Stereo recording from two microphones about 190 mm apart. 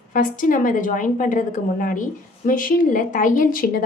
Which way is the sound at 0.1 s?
45° left (ahead or behind).